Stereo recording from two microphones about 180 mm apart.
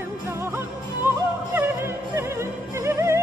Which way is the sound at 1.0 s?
10° right (ahead or behind).